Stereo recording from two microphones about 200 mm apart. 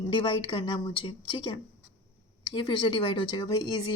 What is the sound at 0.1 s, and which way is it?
Speech, 25° left (ahead or behind).